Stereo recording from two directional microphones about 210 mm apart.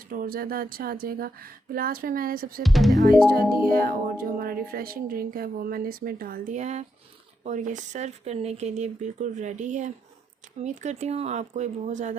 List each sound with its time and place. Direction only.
0.1 s speech: 45° right (ahead or behind)
2.6 s speech: centre (ahead or behind)
3.5 s speech: 45° right (ahead or behind)